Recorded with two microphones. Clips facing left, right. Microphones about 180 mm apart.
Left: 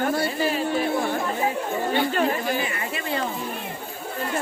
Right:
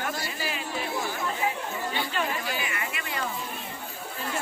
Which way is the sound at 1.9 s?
45° left (ahead or behind).